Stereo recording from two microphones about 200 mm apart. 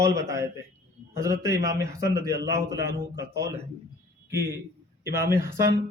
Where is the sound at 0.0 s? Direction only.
15° right (ahead or behind).